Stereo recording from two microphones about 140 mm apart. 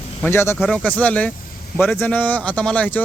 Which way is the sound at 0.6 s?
5° left (ahead or behind).